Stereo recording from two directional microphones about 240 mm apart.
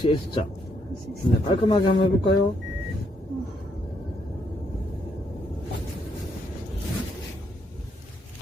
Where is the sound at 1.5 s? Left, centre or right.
Left.